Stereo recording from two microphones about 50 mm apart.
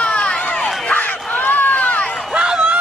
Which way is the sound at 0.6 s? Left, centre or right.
Centre.